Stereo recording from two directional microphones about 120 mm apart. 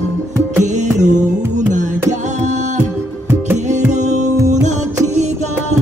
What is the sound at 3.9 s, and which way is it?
Music, 90° right.